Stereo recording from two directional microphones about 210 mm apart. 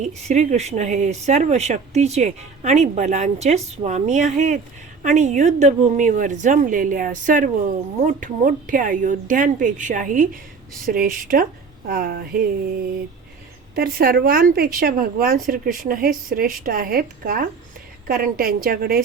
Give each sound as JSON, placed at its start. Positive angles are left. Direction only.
{"t": 0.0, "sound": "a woman's voice", "side_deg": -35}
{"t": 13.7, "sound": "a woman's voice", "side_deg": -45}